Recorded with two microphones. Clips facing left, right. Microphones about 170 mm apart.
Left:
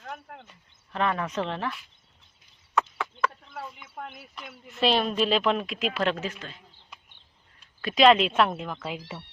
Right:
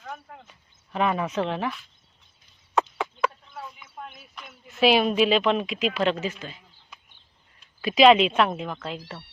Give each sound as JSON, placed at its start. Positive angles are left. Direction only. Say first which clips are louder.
{"t": 0.9, "sound": "speech", "louder": "right 3 dB", "side_deg": -10}
{"t": 2.7, "sound": "chicken", "louder": "right 3 dB", "side_deg": -15}
{"t": 3.9, "sound": "a sound", "louder": "left 3 dB", "side_deg": 65}
{"t": 4.7, "sound": "speech", "louder": "right 4 dB", "side_deg": -5}